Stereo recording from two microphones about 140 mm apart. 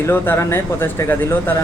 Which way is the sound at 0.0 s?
20° left (ahead or behind).